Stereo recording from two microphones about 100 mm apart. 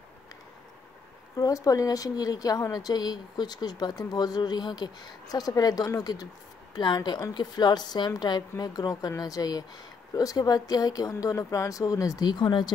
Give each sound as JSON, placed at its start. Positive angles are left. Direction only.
{"t": 1.3, "sound": "a woman's voice", "side_deg": 35}